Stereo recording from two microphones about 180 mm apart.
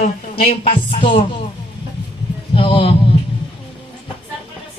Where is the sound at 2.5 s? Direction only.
30° left (ahead or behind).